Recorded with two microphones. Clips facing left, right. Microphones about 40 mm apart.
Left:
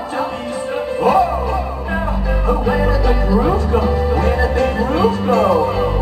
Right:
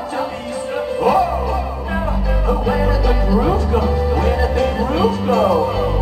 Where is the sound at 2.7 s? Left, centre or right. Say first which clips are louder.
Left 1 dB; centre.